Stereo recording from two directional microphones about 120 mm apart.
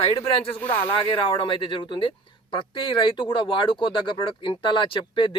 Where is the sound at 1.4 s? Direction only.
45° left (ahead or behind).